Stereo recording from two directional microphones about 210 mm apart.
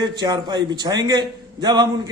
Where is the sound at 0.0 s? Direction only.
20° right (ahead or behind).